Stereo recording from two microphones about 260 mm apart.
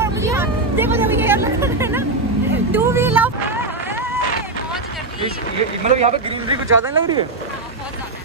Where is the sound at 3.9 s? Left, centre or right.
Centre.